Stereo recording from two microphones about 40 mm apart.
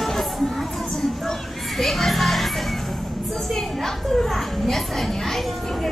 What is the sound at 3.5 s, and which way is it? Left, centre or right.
A child's voice, centre.